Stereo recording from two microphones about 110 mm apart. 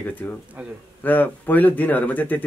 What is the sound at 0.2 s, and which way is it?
Speech, 15° left (ahead or behind).